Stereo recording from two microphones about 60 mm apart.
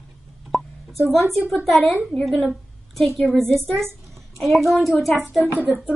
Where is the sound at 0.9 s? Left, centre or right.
Right.